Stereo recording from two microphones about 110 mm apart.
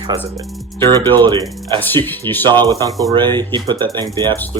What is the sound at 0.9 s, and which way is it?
Speech, 40° right (ahead or behind).